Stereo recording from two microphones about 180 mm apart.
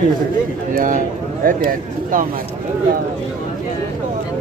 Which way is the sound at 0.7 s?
50° right (ahead or behind).